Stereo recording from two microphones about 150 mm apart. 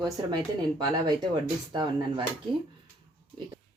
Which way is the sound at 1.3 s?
30° right (ahead or behind).